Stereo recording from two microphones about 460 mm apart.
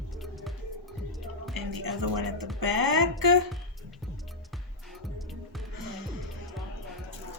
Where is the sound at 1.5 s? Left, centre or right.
Right.